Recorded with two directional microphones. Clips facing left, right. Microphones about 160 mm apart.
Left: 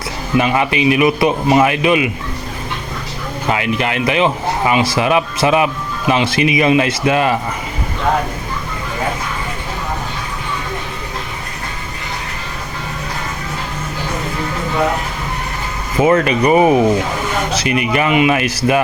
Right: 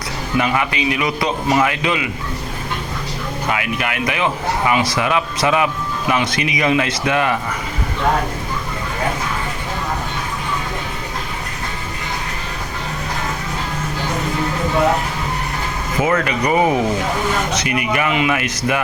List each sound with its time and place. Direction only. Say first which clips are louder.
0.3 s a man's voice: left 4 dB; 20° left (ahead or behind)
3.5 s a man's voice: left 6 dB; 25° left (ahead or behind)
16.0 s a man's voice: left 6 dB; 25° left (ahead or behind)